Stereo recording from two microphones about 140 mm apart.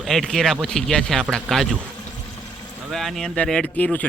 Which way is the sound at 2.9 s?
Centre (ahead or behind).